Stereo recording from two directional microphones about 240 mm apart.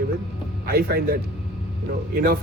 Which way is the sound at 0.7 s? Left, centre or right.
Right.